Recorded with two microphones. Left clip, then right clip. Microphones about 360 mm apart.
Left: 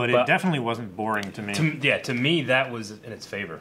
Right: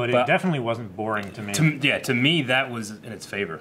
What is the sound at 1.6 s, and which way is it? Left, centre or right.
Speech, left.